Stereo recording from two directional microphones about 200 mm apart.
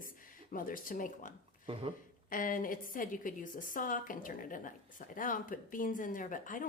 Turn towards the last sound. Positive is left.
turn(degrees=40)  # may be behind; listen again after turning